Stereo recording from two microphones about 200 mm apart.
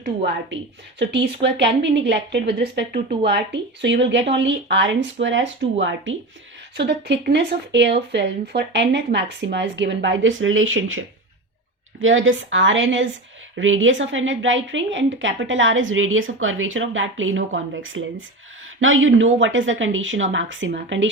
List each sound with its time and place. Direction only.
0.5 s a woman's voice: 60° right (ahead or behind)
6.7 s speech: 55° right (ahead or behind); by 11.0 s 85° right
12.0 s a woman's voice: 75° right (ahead or behind)